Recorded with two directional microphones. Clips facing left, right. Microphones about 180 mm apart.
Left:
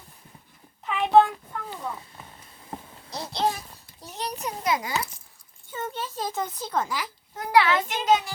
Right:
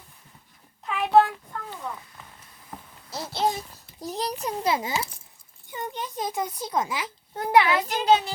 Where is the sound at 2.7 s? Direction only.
30° left (ahead or behind).